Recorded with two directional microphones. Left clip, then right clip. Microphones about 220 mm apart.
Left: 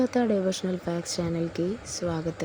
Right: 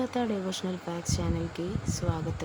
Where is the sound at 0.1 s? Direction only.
10° left (ahead or behind).